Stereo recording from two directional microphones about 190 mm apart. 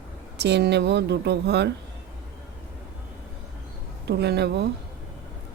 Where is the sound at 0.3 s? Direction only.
60° right (ahead or behind).